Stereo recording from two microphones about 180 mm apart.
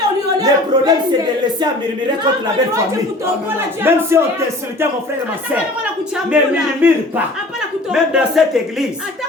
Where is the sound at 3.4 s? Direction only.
10° right (ahead or behind).